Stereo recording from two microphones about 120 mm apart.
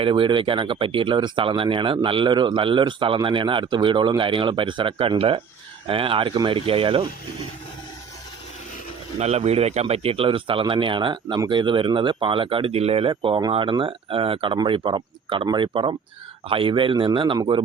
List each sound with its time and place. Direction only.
0.0 s speech: 45° right (ahead or behind)
9.1 s speech: 60° right (ahead or behind); by 17.6 s 40° right (ahead or behind)